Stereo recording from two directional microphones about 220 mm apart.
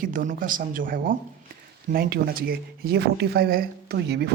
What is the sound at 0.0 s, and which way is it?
Speech, 40° right (ahead or behind).